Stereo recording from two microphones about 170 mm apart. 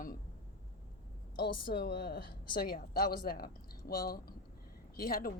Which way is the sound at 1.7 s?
70° left (ahead or behind).